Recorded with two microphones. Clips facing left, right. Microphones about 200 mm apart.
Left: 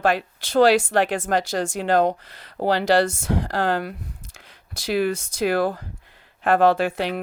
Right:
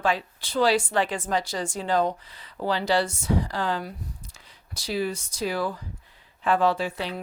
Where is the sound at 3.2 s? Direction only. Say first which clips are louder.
Left 3 dB; 70° left (ahead or behind); by 5.8 s 55° left (ahead or behind).